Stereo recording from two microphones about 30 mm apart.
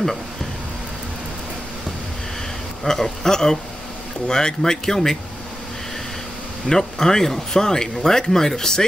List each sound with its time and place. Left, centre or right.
2.8 s speech: centre
6.7 s speech: centre